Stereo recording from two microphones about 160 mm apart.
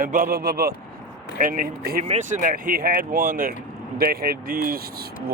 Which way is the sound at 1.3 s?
55° right (ahead or behind).